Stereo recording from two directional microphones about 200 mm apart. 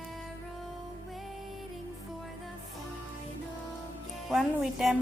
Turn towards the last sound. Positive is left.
turn(degrees=0)  # may be behind; listen again after turning